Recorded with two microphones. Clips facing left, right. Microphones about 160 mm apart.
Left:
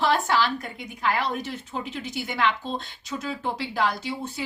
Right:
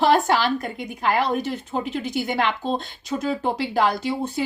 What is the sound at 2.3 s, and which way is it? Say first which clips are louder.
Speech: left 1 dB; 55° right (ahead or behind).